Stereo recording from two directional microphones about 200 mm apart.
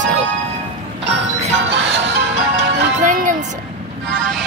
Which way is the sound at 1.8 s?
70° right (ahead or behind).